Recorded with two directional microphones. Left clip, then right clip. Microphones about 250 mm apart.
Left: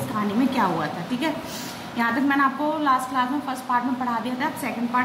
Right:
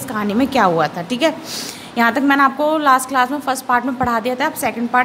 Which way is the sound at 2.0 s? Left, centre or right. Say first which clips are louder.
Right 8 dB; right.